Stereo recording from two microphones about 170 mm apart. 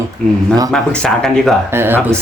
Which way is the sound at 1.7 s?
15° right (ahead or behind).